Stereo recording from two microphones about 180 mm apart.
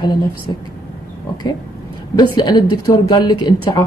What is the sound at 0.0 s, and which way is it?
Speech, 25° left (ahead or behind).